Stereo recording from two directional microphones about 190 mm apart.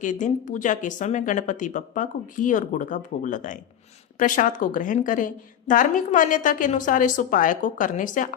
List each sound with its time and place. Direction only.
0.0 s a woman's voice: 40° left (ahead or behind)